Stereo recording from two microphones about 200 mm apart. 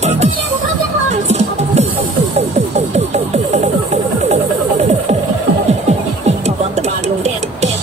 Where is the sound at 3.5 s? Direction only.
35° right (ahead or behind).